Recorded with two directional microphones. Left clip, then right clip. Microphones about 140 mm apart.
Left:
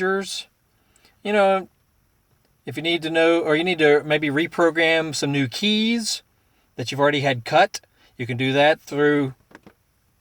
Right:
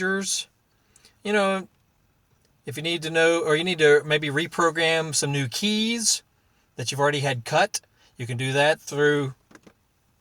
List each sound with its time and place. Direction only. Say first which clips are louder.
0.1 s speech: left 2 dB; 20° left (ahead or behind)
1.0 s a sound: left 4 dB; 20° left (ahead or behind)
2.6 s speech: left 4 dB; 20° left (ahead or behind)